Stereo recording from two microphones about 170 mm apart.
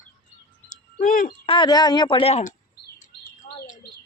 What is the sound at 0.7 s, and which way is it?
Bird, 50° left (ahead or behind).